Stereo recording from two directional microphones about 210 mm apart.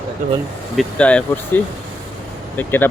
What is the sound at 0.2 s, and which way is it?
Speech, 40° right (ahead or behind).